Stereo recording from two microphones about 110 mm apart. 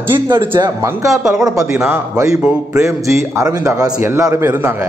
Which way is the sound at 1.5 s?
30° right (ahead or behind).